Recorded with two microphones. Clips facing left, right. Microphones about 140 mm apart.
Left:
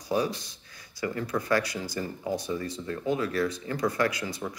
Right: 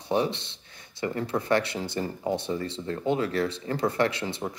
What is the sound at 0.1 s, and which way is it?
Speech, 25° right (ahead or behind).